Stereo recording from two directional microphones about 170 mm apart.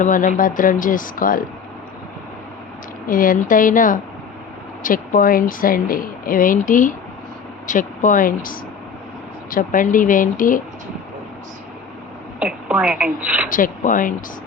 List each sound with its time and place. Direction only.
0.0 s speech: 50° left (ahead or behind)
3.1 s speech: 55° left (ahead or behind)
12.4 s a woman's voice: 5° right (ahead or behind)
13.5 s speech: 50° left (ahead or behind)